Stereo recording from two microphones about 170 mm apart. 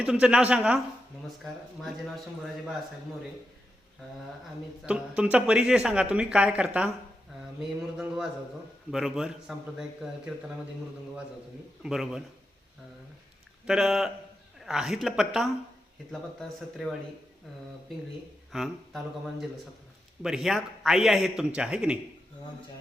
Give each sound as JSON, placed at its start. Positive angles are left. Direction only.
{"t": 0.0, "sound": "a man's voice", "side_deg": -5}
{"t": 4.8, "sound": "speech", "side_deg": -5}
{"t": 7.9, "sound": "speech", "side_deg": -5}
{"t": 11.8, "sound": "speech", "side_deg": -5}
{"t": 13.7, "sound": "speech", "side_deg": 0}
{"t": 18.5, "sound": "speech", "side_deg": 0}